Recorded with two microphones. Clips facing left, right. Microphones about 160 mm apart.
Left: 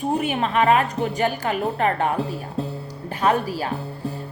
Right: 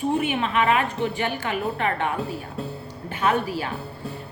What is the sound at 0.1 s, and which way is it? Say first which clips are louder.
A woman's voice: left 4 dB; 40° left (ahead or behind).